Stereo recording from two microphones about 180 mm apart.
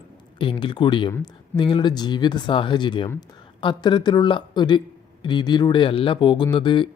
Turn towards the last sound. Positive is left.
turn(degrees=25)  # may be behind; listen again after turning